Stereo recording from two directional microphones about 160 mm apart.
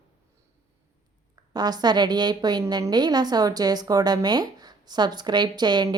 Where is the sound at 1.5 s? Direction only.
25° right (ahead or behind).